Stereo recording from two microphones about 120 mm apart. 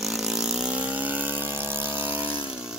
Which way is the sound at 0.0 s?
Centre (ahead or behind).